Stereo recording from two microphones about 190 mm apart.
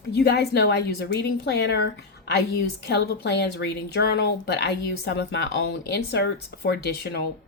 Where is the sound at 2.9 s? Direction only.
60° left (ahead or behind).